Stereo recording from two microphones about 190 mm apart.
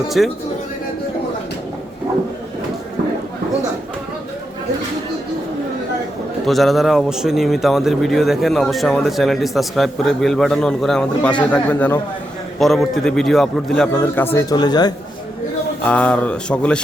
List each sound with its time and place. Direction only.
0.2 s a man's voice: centre (ahead or behind)
6.4 s a man's voice: centre (ahead or behind)
14.3 s speech: 20° left (ahead or behind)
15.8 s speech: 5° left (ahead or behind)